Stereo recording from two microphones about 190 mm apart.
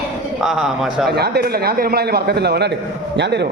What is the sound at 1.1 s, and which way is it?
A man's voice, 55° right (ahead or behind).